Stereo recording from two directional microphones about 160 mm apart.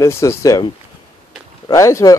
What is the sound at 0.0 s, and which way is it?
Speech, 15° left (ahead or behind).